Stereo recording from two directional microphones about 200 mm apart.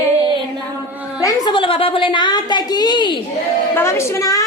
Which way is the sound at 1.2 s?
20° left (ahead or behind).